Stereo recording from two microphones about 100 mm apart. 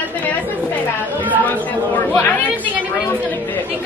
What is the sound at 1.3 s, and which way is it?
Speech, 15° left (ahead or behind).